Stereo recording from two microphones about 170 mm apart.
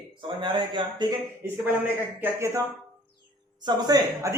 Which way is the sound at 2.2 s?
15° right (ahead or behind).